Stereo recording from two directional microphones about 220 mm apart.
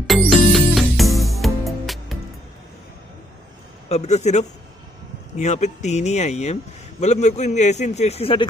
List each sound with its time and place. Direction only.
0.0 s music: centre (ahead or behind)
3.9 s a man's voice: 30° left (ahead or behind)